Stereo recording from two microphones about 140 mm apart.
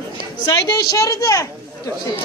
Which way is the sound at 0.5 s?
25° left (ahead or behind).